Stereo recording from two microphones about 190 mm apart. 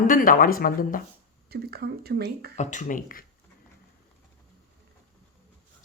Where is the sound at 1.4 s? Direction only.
55° right (ahead or behind).